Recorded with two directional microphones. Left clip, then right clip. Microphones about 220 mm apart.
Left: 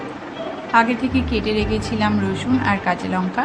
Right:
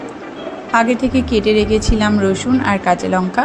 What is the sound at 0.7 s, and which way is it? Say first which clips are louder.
A woman's voice: right 3 dB; 20° right (ahead or behind).